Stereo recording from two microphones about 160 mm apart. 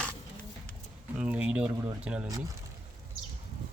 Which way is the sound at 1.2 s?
10° right (ahead or behind).